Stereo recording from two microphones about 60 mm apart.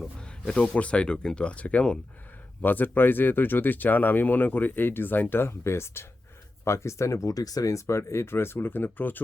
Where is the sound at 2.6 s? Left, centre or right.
Left.